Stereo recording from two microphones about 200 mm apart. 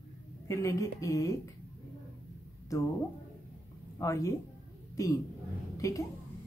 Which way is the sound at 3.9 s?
15° left (ahead or behind).